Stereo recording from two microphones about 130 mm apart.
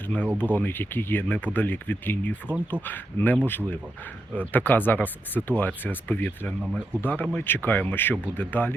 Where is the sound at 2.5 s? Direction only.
10° right (ahead or behind).